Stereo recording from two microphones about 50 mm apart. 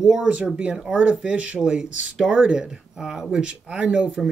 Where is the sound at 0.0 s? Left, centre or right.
Centre.